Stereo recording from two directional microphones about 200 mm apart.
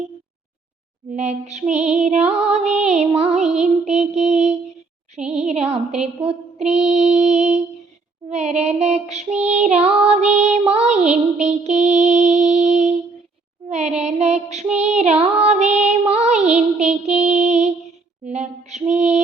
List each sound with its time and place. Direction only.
1.1 s female singing: 35° right (ahead or behind)
4.1 s child singing: 35° right (ahead or behind)
5.3 s female singing: 35° right (ahead or behind)
13.7 s child singing: 35° right (ahead or behind)
14.8 s music: 35° right (ahead or behind)
18.3 s mantra: 35° right (ahead or behind)